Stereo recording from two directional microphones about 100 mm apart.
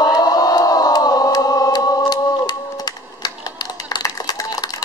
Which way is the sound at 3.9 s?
40° left (ahead or behind).